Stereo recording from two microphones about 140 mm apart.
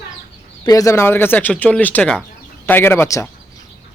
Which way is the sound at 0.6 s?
25° left (ahead or behind).